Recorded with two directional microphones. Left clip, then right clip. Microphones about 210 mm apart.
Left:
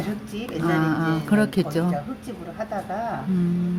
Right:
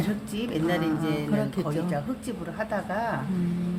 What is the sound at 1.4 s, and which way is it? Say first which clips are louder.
Speech: left 6 dB; 35° left (ahead or behind).